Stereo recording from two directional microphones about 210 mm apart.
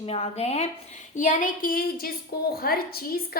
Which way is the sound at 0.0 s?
30° left (ahead or behind).